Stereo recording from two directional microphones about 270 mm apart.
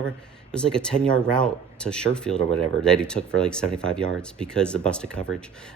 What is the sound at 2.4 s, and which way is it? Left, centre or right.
Speech, right.